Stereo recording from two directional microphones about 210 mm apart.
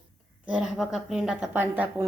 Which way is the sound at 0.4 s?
5° right (ahead or behind).